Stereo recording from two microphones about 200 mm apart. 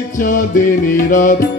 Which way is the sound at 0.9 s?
40° left (ahead or behind).